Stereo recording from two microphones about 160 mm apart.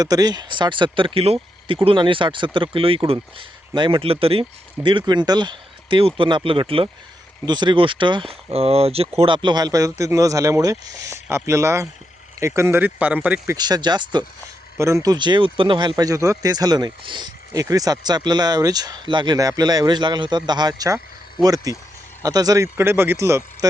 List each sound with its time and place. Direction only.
0.0 s speech: 25° right (ahead or behind)
13.6 s speech: 25° right (ahead or behind)